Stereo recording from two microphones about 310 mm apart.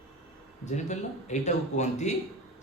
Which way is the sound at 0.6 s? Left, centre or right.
Left.